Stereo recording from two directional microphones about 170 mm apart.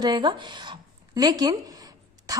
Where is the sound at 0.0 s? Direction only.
25° right (ahead or behind).